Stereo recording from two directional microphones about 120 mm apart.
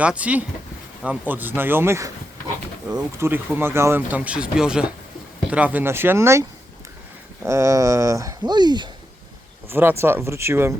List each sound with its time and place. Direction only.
0.0 s speech: 10° right (ahead or behind)
7.4 s speech: 25° right (ahead or behind)
9.6 s speech: 20° right (ahead or behind)